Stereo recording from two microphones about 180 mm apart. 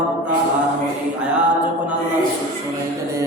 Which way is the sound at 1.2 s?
5° right (ahead or behind).